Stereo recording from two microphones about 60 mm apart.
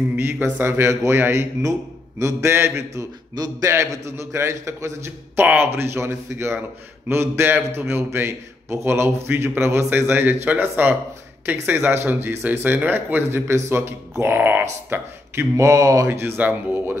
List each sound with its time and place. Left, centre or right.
0.2 s a man's voice: right
1.6 s a man's voice: right
2.9 s a man's voice: right
14.9 s a man's voice: right
16.1 s a man's voice: right